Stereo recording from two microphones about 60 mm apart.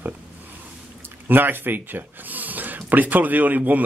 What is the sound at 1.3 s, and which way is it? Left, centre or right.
Speech, right.